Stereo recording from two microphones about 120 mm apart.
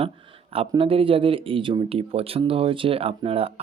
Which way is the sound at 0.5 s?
50° right (ahead or behind).